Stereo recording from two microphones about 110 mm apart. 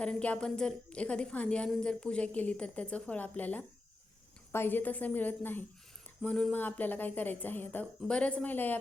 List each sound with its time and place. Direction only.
0.0 s a woman's voice: 10° left (ahead or behind)